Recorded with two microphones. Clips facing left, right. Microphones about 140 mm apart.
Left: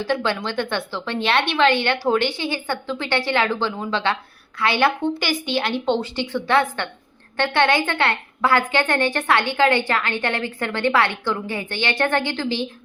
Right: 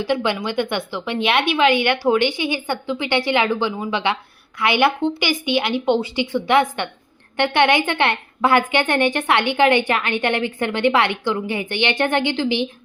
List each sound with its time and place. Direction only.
0.0 s a woman's voice: 15° right (ahead or behind)